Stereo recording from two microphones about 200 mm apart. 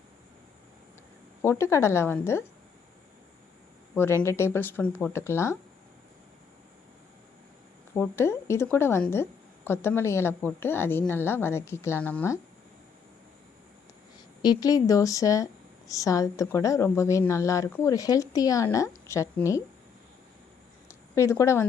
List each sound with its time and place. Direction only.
1.4 s a woman's voice: 15° left (ahead or behind)
3.9 s a woman's voice: 10° left (ahead or behind)
7.9 s a woman's voice: 10° left (ahead or behind)
14.4 s a woman's voice: 20° left (ahead or behind)
20.8 s a sound: 15° left (ahead or behind)